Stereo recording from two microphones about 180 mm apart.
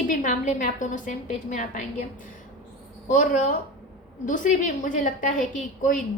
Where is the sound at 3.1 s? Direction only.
45° left (ahead or behind).